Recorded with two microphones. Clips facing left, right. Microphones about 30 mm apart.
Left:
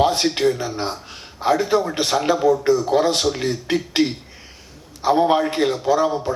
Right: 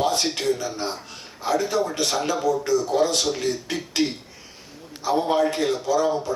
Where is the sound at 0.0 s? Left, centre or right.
Left.